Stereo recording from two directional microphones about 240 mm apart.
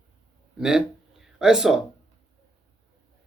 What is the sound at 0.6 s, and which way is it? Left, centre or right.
Speech, centre.